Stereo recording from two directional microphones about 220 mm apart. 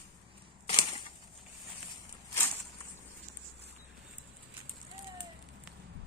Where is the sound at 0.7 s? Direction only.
25° left (ahead or behind).